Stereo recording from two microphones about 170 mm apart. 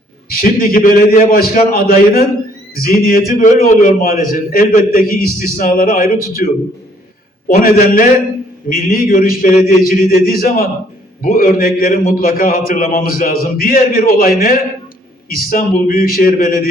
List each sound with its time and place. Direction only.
0.3 s a man's voice: 60° left (ahead or behind)